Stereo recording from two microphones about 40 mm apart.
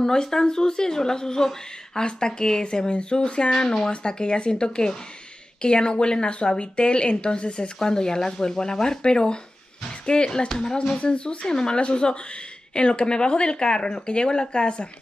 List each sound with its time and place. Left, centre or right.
0.0 s speech: centre